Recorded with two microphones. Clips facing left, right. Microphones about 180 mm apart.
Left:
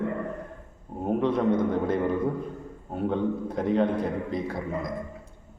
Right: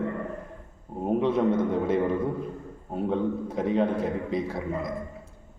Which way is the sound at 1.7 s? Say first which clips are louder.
Right 1 dB; centre (ahead or behind).